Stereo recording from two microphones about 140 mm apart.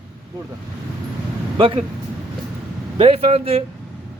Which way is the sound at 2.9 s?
45° right (ahead or behind).